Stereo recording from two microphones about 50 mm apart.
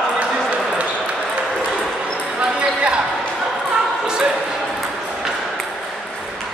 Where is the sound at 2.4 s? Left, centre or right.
Right.